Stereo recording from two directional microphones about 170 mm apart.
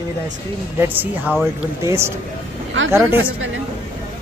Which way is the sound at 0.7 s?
10° right (ahead or behind).